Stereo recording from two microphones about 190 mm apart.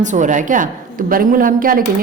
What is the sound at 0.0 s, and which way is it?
A woman's voice, 40° right (ahead or behind).